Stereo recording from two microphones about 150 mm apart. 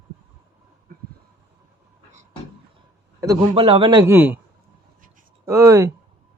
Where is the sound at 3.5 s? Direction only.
40° right (ahead or behind).